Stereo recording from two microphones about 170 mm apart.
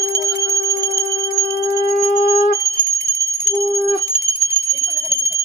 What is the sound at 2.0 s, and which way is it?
Music, 55° left (ahead or behind).